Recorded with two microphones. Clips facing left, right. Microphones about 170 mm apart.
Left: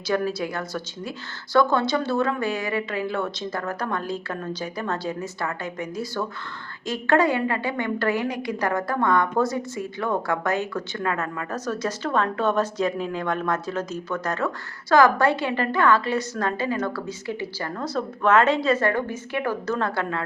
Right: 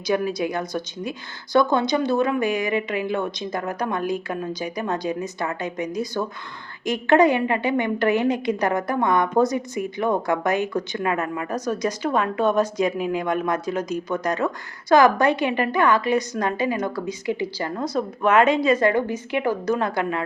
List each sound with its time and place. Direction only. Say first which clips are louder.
0.1 s a woman's voice: right 2 dB; 15° right (ahead or behind)